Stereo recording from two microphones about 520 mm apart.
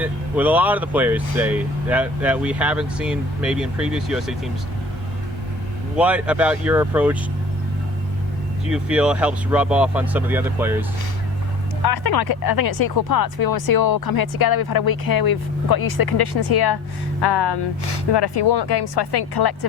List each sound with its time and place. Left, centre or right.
0.0 s speech: centre
6.0 s speech: centre
8.7 s speech: centre
11.8 s speech: left